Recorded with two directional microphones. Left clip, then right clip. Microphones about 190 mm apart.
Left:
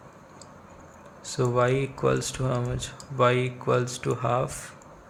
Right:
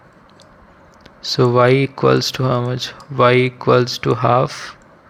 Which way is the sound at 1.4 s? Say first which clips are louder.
Right 11 dB; 30° right (ahead or behind).